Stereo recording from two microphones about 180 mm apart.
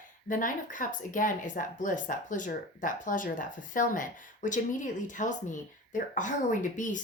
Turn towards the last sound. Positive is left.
turn(degrees=45)  # may be behind; listen again after turning